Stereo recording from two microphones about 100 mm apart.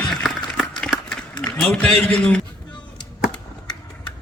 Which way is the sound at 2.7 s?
50° left (ahead or behind).